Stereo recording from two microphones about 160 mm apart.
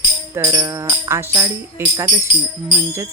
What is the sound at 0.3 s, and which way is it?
Speech, 20° right (ahead or behind).